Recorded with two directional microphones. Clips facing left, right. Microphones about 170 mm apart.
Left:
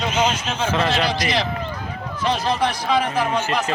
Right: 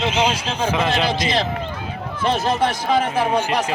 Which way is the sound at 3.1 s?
15° right (ahead or behind).